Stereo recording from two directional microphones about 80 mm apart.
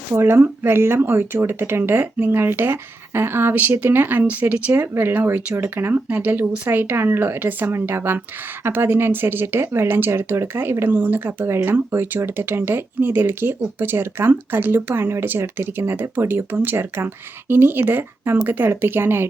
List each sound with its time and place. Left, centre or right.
0.1 s speech: right